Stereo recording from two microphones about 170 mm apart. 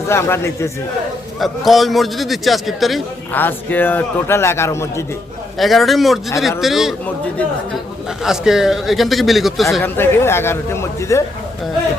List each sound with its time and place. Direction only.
0.1 s a man's voice: 15° left (ahead or behind)
1.4 s a man's voice: centre (ahead or behind)
3.3 s a man's voice: 10° left (ahead or behind)
5.5 s a man's voice: centre (ahead or behind)
8.2 s a man's voice: 5° right (ahead or behind)
9.8 s a man's voice: 15° left (ahead or behind)